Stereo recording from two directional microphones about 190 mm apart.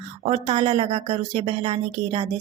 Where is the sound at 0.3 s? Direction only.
35° right (ahead or behind).